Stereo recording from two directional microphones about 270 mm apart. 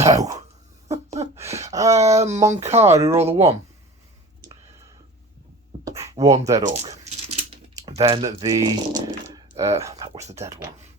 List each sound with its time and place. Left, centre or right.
0.9 s a sound: right
1.7 s a sound: centre
2.0 s speech: right
2.9 s speech: centre
4.4 s whispering: centre
6.0 s speech: centre
6.7 s speech: right
7.0 s a sound: right
7.8 s speech: centre
10.2 s speech: right
10.4 s speech: centre